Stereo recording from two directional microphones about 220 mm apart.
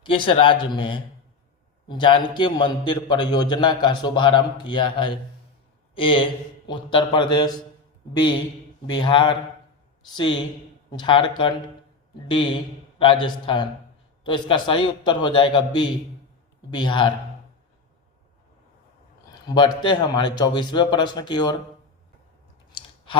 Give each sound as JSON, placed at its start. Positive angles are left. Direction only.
{"t": 0.0, "sound": "a man's voice", "side_deg": 25}
{"t": 8.9, "sound": "a man's voice", "side_deg": 20}
{"t": 10.9, "sound": "a man's voice", "side_deg": 20}
{"t": 19.5, "sound": "a man's voice", "side_deg": 20}